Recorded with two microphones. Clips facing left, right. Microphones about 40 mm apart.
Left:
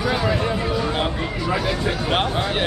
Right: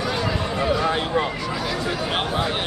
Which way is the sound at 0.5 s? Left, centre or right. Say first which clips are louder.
Right 2 dB; centre.